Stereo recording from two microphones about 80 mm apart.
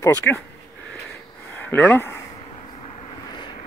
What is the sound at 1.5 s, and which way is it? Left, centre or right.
Speech, centre.